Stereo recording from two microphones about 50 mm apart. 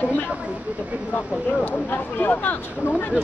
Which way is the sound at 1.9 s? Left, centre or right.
Left.